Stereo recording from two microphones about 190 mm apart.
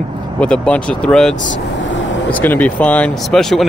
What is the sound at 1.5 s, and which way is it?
Speech, 75° left (ahead or behind).